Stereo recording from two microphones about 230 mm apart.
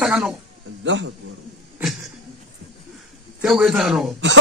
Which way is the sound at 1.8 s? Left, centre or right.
Centre.